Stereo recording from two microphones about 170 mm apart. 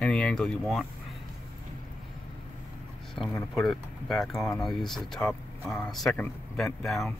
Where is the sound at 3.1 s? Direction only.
Centre (ahead or behind).